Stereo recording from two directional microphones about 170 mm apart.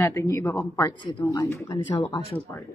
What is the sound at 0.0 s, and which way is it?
Speech, 15° left (ahead or behind).